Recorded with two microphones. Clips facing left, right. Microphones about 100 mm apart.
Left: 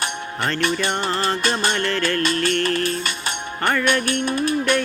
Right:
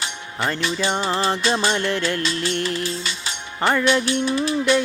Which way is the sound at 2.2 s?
55° left (ahead or behind).